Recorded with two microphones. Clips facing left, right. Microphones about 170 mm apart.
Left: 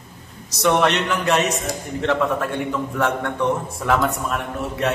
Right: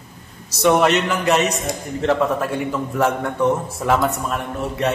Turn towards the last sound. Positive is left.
turn(degrees=0)  # may be behind; listen again after turning